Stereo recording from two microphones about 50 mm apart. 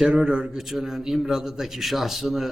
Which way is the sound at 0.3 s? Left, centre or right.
Right.